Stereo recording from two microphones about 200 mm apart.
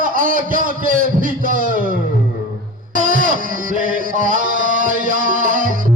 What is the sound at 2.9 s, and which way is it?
Music, 40° right (ahead or behind).